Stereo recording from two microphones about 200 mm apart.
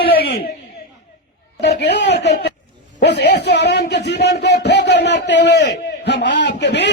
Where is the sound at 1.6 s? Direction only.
60° left (ahead or behind).